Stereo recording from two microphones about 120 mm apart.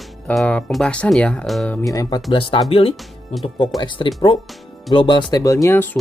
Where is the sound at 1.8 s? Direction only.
30° left (ahead or behind).